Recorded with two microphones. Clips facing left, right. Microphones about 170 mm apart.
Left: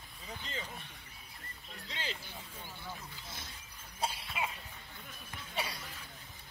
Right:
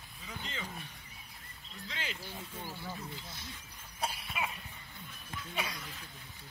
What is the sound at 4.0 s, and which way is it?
Cough, 25° left (ahead or behind).